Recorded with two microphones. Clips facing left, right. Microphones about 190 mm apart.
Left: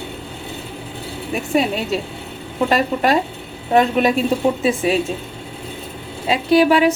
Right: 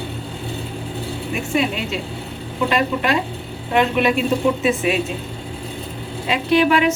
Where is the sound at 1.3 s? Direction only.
40° left (ahead or behind).